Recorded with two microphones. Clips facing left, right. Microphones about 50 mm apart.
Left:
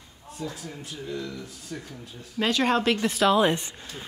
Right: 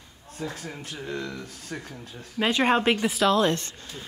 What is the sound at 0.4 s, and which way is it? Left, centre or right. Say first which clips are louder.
Speech: right 1 dB; right.